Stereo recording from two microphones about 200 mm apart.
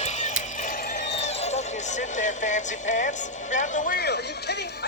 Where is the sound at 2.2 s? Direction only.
40° left (ahead or behind).